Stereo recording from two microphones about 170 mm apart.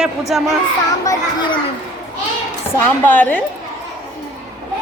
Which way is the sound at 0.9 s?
20° left (ahead or behind).